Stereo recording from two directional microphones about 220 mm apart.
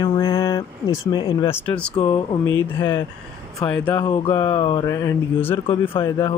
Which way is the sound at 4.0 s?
20° left (ahead or behind).